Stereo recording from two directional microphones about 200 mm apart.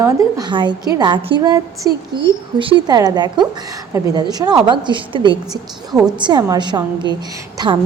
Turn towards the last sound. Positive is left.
turn(degrees=-25)  # may be behind; listen again after turning